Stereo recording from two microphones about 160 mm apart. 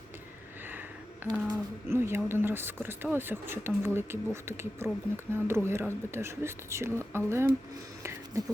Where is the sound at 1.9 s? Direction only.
15° right (ahead or behind).